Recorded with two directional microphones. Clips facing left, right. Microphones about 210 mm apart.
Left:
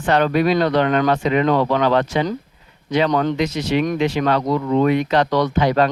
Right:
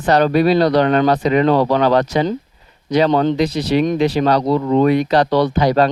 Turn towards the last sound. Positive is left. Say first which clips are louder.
# right 2 dB
turn(degrees=-35)  # may be behind; listen again after turning